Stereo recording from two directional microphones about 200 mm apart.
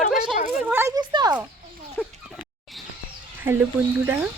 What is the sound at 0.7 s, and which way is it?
Speech, 10° right (ahead or behind).